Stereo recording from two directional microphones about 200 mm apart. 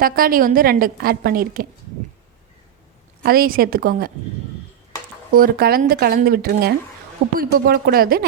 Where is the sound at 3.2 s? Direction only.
50° right (ahead or behind).